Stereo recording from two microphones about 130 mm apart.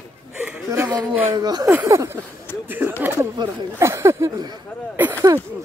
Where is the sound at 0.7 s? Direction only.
25° right (ahead or behind).